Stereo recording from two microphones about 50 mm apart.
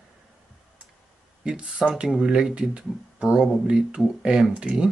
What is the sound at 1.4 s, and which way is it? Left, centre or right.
Speech, right.